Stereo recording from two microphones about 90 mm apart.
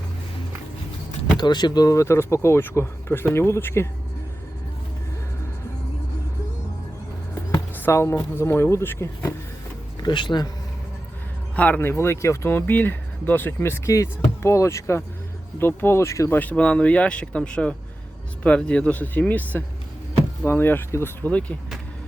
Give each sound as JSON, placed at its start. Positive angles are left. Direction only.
{"t": 1.4, "sound": "speech", "side_deg": 50}
{"t": 7.8, "sound": "speech", "side_deg": 30}
{"t": 10.0, "sound": "speech", "side_deg": 60}
{"t": 11.5, "sound": "speech", "side_deg": 15}
{"t": 16.4, "sound": "speech", "side_deg": 15}